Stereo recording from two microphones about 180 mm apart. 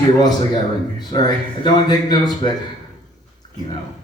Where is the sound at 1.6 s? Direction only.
25° left (ahead or behind).